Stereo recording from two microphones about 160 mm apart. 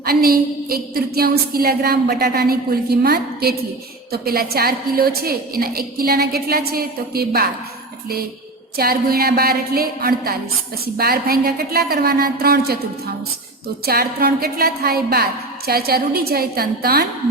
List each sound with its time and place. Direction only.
0.0 s a woman's voice: 70° right (ahead or behind)
8.7 s a woman's voice: 70° right (ahead or behind)
13.8 s a woman's voice: 75° right (ahead or behind)